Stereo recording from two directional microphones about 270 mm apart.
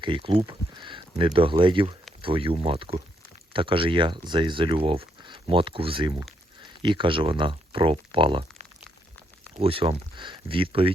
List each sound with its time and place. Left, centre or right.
0.0 s speech: centre